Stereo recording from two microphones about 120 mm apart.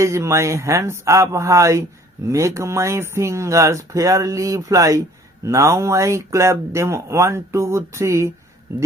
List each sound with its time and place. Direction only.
0.0 s speech: 25° right (ahead or behind)